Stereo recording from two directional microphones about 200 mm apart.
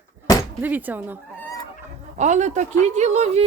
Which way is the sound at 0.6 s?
10° right (ahead or behind).